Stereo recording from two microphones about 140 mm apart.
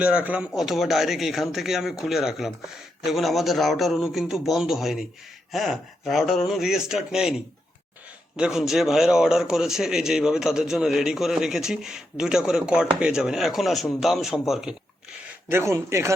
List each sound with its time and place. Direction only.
0.0 s a man's voice: 10° right (ahead or behind)
15.4 s a man's voice: 15° right (ahead or behind)